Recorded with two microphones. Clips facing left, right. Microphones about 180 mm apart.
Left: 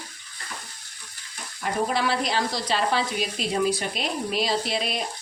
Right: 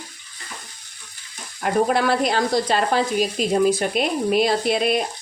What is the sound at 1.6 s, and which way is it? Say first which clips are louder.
Speech: right 6 dB; 55° right (ahead or behind).